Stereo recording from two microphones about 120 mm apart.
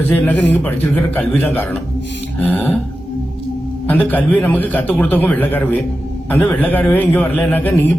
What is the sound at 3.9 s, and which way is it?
A man's voice, 15° left (ahead or behind).